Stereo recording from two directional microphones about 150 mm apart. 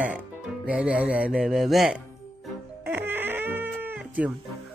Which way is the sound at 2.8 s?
15° right (ahead or behind).